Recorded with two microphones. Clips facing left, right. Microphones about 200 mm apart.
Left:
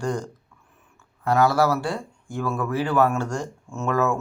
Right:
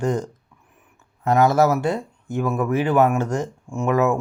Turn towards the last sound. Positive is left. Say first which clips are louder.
# right 4 dB
turn(degrees=-20)  # may be behind; listen again after turning